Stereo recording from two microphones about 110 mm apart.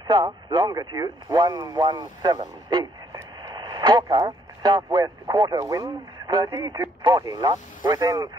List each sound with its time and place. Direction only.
0.0 s speech: 40° right (ahead or behind)